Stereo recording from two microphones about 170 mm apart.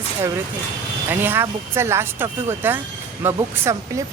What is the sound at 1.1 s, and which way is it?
Speech, 10° right (ahead or behind).